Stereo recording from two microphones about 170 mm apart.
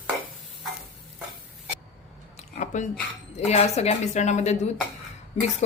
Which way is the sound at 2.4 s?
45° left (ahead or behind).